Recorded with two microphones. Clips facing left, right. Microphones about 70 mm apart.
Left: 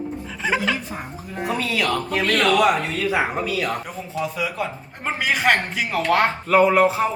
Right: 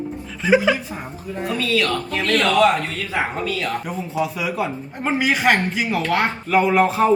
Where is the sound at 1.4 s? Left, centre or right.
Centre.